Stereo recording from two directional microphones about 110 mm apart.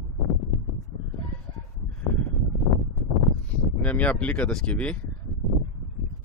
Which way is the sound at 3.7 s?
15° left (ahead or behind).